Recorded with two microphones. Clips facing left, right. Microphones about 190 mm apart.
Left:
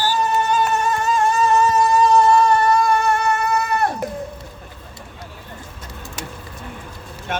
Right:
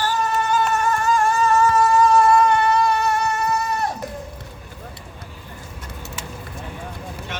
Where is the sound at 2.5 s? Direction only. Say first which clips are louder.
Left 2 dB; 40° left (ahead or behind); by 3.9 s 60° left (ahead or behind).